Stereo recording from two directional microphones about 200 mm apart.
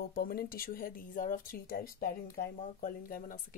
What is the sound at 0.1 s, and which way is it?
Speech, 45° left (ahead or behind).